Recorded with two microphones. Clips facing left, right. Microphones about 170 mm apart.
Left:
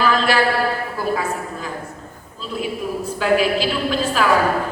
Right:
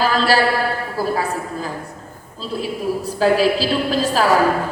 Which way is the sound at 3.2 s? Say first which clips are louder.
Right 2 dB; 35° right (ahead or behind).